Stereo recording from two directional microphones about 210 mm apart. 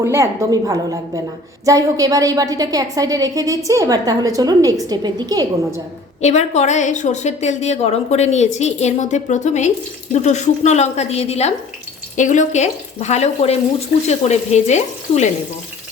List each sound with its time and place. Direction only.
0.0 s a woman's voice: 15° right (ahead or behind)
6.2 s a woman's voice: 30° left (ahead or behind)